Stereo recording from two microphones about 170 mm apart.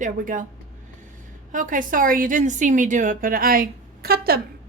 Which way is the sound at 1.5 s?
50° right (ahead or behind).